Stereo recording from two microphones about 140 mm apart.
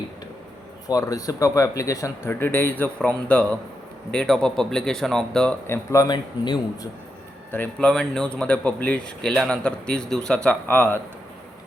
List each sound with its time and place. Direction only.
0.9 s speech: 25° left (ahead or behind); by 5.5 s 5° left (ahead or behind)
5.6 s speech: 20° left (ahead or behind)
7.5 s a man's voice: 10° left (ahead or behind)